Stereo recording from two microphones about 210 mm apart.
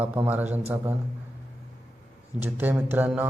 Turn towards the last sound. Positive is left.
turn(degrees=-10)  # may be behind; listen again after turning